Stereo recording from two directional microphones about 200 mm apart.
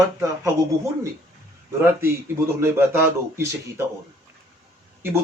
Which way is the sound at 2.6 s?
10° right (ahead or behind).